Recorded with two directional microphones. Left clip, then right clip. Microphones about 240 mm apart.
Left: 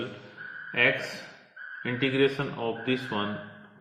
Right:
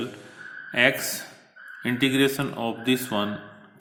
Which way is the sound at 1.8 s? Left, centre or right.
Right.